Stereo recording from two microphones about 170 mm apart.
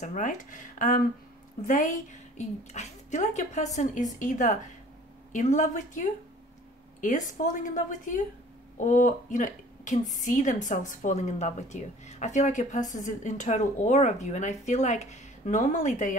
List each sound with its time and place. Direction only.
0.0 s a woman's voice: 50° left (ahead or behind)